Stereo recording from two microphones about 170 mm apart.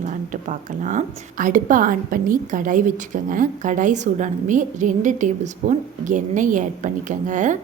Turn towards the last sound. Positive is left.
turn(degrees=-45)  # may be behind; listen again after turning